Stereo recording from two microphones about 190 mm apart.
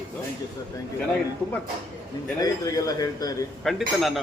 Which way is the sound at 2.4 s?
20° left (ahead or behind).